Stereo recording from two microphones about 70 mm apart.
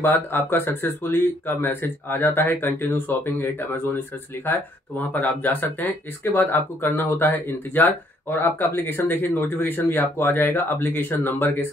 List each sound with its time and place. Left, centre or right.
0.0 s speech: left